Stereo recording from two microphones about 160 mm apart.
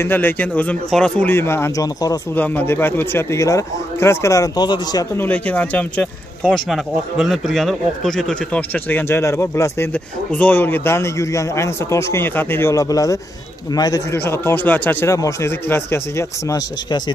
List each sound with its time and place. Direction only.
0.0 s speech: 15° left (ahead or behind)
2.3 s speech: 10° left (ahead or behind); by 5.0 s 25° left (ahead or behind)
5.1 s a man's voice: 10° left (ahead or behind)